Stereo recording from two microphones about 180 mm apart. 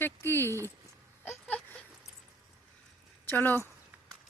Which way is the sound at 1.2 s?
10° left (ahead or behind).